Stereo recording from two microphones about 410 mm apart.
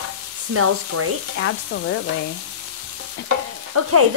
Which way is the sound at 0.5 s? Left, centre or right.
Right.